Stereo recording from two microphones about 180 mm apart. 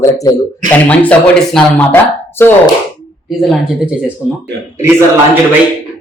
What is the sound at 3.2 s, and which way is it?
Speech, centre (ahead or behind).